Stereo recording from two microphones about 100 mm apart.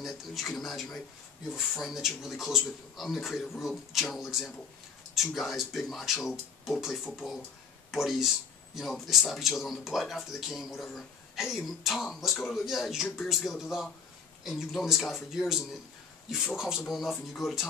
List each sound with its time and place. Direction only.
0.0 s speech: centre (ahead or behind)